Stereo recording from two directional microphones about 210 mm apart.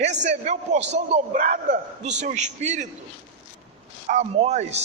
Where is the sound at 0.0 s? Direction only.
35° right (ahead or behind).